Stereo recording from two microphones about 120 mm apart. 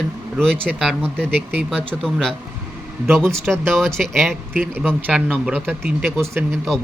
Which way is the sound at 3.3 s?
5° left (ahead or behind).